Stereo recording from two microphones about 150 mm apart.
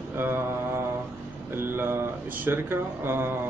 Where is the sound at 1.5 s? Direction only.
15° right (ahead or behind).